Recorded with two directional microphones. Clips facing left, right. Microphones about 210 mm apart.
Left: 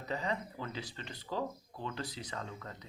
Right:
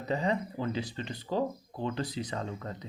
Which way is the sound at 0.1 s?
25° right (ahead or behind).